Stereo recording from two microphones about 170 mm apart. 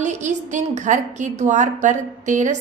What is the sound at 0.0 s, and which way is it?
A woman's voice, 45° right (ahead or behind).